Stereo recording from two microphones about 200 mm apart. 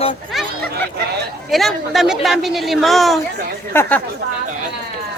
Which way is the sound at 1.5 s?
Centre (ahead or behind).